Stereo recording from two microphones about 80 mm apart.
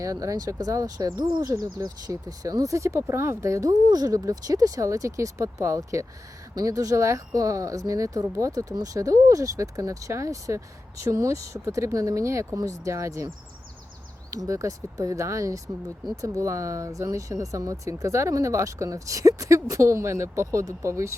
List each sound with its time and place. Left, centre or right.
0.0 s speech: right
1.4 s speech: right
3.7 s speech: right
14.3 s speech: right